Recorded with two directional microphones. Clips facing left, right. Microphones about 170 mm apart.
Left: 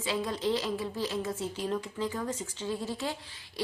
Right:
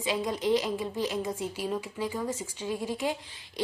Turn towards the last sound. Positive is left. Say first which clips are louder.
# right 3 dB
turn(degrees=-15)  # may be behind; listen again after turning